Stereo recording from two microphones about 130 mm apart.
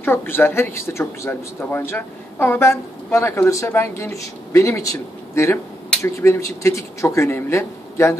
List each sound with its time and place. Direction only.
0.0 s speech: 15° left (ahead or behind)